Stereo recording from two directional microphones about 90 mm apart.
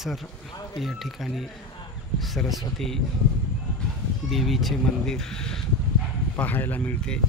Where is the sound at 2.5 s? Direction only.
5° left (ahead or behind).